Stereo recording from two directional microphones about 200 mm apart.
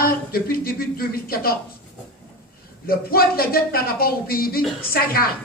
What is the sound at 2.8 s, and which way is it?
A woman's voice, 50° left (ahead or behind).